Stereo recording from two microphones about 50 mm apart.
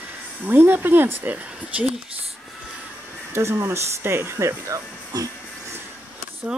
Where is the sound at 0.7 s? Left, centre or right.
Right.